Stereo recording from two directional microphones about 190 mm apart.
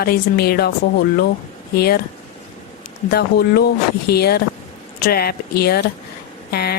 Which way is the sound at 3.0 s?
55° left (ahead or behind).